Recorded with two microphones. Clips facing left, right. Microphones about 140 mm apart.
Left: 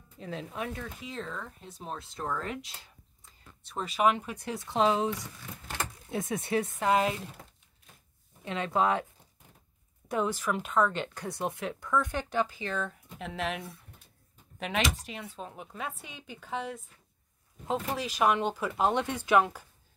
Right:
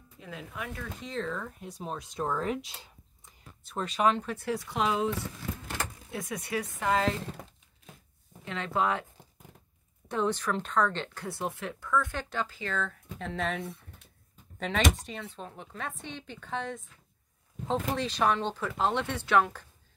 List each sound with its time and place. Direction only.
0.2 s speech: 30° left (ahead or behind)
1.0 s speech: centre (ahead or behind)
1.6 s speech: 10° right (ahead or behind)
3.6 s speech: 5° left (ahead or behind); by 5.1 s 25° left (ahead or behind)
6.1 s speech: 25° left (ahead or behind)
8.5 s speech: 20° left (ahead or behind)
10.0 s speech: 10° left (ahead or behind)
13.2 s speech: 5° left (ahead or behind)